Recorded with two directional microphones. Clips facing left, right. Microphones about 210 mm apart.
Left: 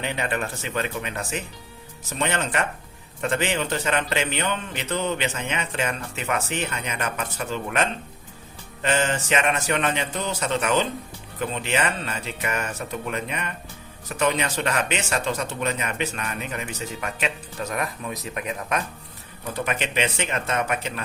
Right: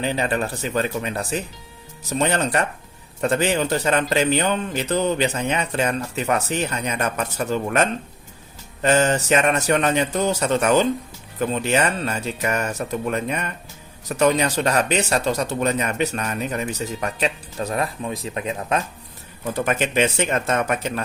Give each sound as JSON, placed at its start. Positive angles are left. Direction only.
{"t": 0.0, "sound": "speech", "side_deg": -35}
{"t": 19.6, "sound": "speech", "side_deg": -45}